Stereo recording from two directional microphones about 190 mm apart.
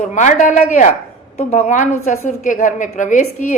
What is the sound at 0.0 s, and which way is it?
A woman's voice, 40° left (ahead or behind).